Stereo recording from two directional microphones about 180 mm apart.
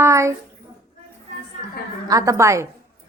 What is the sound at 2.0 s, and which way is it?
Speech, 20° right (ahead or behind).